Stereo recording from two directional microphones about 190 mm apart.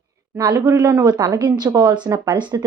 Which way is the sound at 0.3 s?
20° right (ahead or behind).